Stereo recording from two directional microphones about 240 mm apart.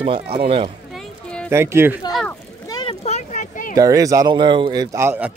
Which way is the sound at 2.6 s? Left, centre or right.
Centre.